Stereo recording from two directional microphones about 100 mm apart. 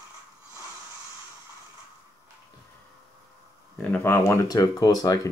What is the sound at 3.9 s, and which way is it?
Speech, 25° left (ahead or behind).